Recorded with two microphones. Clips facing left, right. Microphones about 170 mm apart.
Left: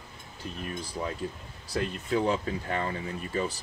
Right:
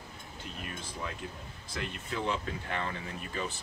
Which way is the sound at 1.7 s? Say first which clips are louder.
Left 9 dB; 40° left (ahead or behind).